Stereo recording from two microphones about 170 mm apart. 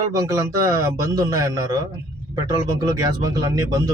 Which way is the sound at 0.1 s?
20° right (ahead or behind).